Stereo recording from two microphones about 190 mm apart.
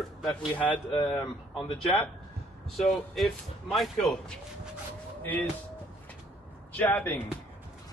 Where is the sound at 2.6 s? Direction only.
Centre (ahead or behind).